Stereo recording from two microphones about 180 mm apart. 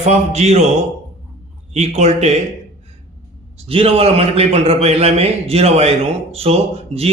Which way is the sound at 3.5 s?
30° right (ahead or behind).